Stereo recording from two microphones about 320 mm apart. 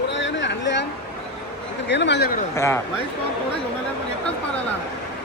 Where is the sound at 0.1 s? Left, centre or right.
Left.